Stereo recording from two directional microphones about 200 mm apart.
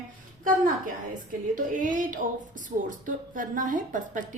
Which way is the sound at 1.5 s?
40° right (ahead or behind).